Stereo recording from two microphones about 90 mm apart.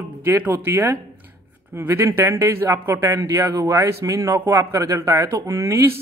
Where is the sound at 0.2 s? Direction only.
25° right (ahead or behind).